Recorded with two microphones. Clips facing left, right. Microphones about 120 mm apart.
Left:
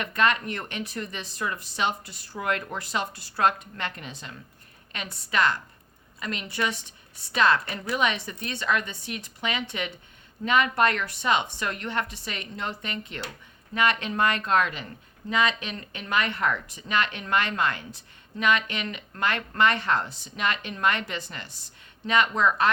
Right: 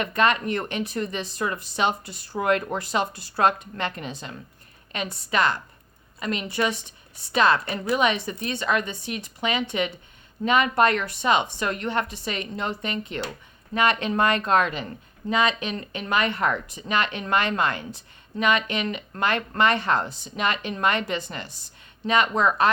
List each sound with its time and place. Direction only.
0.0 s a woman's voice: 25° right (ahead or behind)